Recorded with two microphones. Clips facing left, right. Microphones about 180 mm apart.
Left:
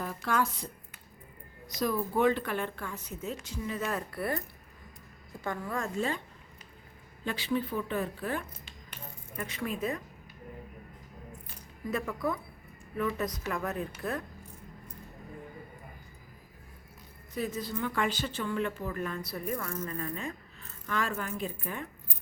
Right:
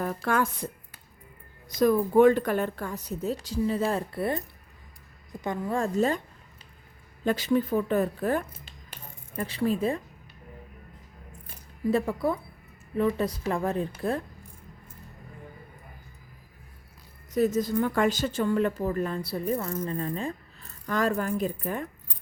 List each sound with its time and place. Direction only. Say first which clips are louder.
0.3 s a woman's voice: right 3 dB; 50° right (ahead or behind)
7.3 s speech: right 7 dB; 45° right (ahead or behind)
11.9 s a woman's voice: right 7 dB; 30° right (ahead or behind)
17.3 s a woman's voice: right 10 dB; 45° right (ahead or behind)